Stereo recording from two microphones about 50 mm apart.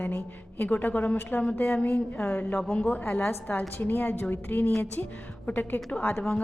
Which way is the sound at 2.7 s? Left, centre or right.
Left.